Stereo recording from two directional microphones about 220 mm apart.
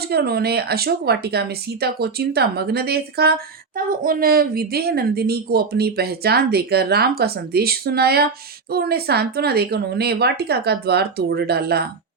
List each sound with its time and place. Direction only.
0.0 s speech: 45° right (ahead or behind)